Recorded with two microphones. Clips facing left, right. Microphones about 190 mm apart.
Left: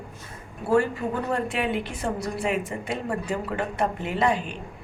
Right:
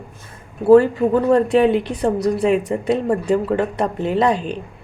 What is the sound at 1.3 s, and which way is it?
A woman's voice, 35° right (ahead or behind).